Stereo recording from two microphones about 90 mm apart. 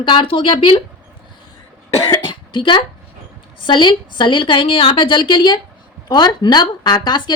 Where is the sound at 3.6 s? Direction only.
65° left (ahead or behind).